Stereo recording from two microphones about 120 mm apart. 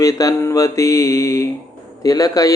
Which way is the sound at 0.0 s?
30° left (ahead or behind).